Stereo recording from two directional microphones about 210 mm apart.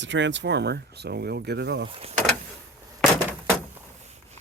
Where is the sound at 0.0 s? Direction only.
60° right (ahead or behind).